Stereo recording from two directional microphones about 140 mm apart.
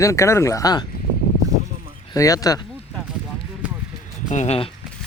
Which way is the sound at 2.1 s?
25° left (ahead or behind).